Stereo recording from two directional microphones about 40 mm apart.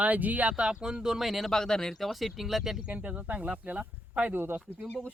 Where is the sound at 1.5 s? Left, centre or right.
Centre.